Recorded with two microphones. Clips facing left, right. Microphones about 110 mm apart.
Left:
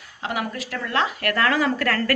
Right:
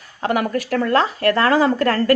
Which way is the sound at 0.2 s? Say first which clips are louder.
Right 8 dB; 50° right (ahead or behind).